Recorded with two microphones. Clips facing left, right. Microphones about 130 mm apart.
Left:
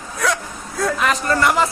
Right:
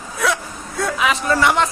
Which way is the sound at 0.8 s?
Centre (ahead or behind).